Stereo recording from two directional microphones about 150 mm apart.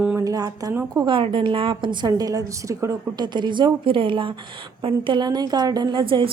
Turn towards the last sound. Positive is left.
turn(degrees=-35)  # may be behind; listen again after turning